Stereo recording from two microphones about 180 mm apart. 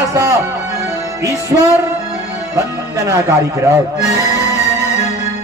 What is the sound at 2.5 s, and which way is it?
Speech, 15° right (ahead or behind).